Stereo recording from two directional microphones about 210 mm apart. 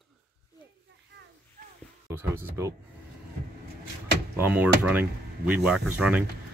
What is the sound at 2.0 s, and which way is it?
Speech, 10° right (ahead or behind).